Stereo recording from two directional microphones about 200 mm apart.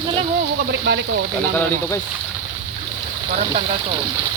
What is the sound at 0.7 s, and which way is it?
Speech, 60° right (ahead or behind).